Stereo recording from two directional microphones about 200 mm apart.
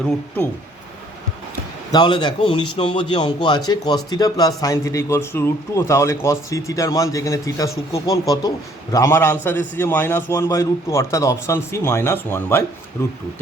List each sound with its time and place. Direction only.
1.9 s a man's voice: 25° left (ahead or behind)